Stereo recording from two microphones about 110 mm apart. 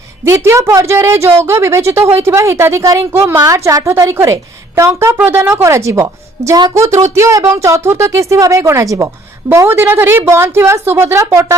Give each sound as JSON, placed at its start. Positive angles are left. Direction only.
{"t": 0.3, "sound": "a woman's voice", "side_deg": -25}